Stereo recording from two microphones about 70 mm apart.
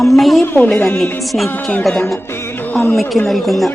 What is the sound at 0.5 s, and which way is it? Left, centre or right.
Speech, left.